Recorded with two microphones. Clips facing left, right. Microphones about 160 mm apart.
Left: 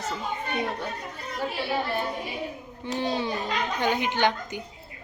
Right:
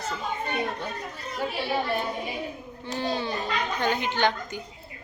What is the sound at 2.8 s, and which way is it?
A man's voice, 15° left (ahead or behind).